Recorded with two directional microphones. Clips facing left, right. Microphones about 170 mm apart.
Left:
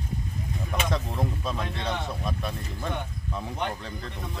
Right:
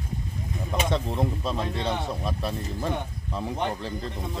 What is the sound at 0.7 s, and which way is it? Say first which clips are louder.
Speech: right 3 dB; 25° right (ahead or behind).